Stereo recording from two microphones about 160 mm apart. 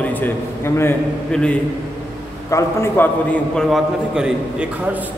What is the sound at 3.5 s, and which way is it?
A man's voice, centre (ahead or behind).